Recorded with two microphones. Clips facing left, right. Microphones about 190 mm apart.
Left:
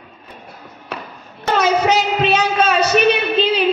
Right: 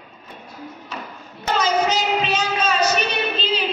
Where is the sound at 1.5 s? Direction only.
65° left (ahead or behind).